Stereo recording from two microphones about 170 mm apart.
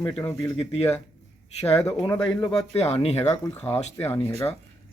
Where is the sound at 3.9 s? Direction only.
15° left (ahead or behind).